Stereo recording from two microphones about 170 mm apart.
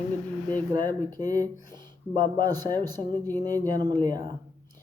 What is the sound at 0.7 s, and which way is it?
Speech, 25° right (ahead or behind).